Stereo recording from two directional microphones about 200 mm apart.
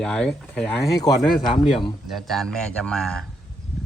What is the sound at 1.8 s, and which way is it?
Speech, centre (ahead or behind).